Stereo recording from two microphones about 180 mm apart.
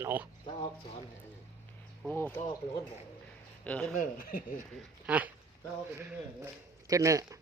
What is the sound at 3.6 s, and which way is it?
Speech, 5° left (ahead or behind).